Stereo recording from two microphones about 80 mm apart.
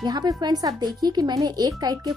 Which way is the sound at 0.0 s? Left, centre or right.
Right.